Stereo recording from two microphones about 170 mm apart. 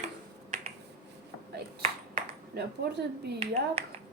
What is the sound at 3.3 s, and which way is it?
Speech, 35° right (ahead or behind).